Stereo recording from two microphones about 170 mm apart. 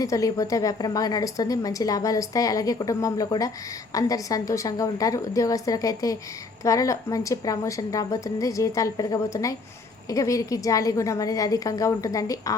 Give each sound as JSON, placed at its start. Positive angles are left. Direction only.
{"t": 0.0, "sound": "a woman's voice", "side_deg": 20}